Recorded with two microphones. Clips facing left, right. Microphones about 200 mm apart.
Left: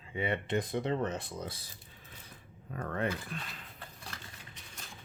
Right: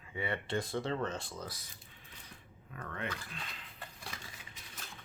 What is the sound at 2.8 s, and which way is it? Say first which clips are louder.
Speech: left 8 dB; 40° left (ahead or behind).